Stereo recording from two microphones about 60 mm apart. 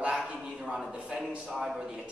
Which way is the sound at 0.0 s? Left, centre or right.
Centre.